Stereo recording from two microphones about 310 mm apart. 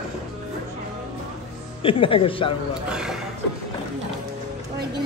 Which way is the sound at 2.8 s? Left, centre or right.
Centre.